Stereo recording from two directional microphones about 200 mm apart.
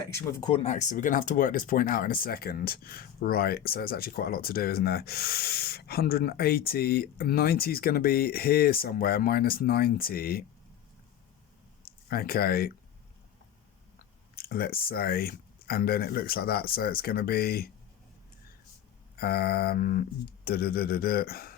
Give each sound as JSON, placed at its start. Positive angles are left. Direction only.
{"t": 0.1, "sound": "speech", "side_deg": 15}
{"t": 0.5, "sound": "speech", "side_deg": 35}
{"t": 12.0, "sound": "speech", "side_deg": 50}
{"t": 14.3, "sound": "speech", "side_deg": 50}
{"t": 19.1, "sound": "speech", "side_deg": 50}